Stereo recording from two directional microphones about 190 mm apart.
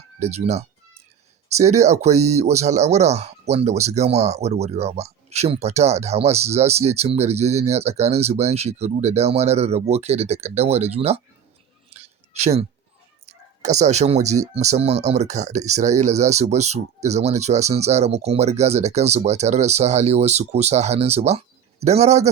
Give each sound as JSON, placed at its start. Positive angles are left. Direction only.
{"t": 0.2, "sound": "speech", "side_deg": -35}
{"t": 11.9, "sound": "a sound", "side_deg": -35}
{"t": 13.2, "sound": "speech", "side_deg": -35}